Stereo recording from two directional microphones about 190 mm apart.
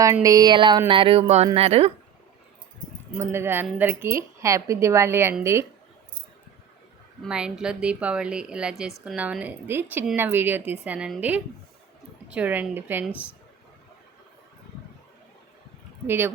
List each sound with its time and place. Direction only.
0.0 s a sound: 15° right (ahead or behind)
1.5 s speech: 30° right (ahead or behind)
3.2 s a woman's voice: 10° right (ahead or behind)
7.3 s a woman's voice: 5° right (ahead or behind)
16.0 s a woman's voice: 10° right (ahead or behind)